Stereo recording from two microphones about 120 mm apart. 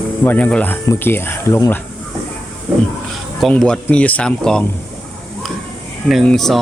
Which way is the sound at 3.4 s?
5° left (ahead or behind).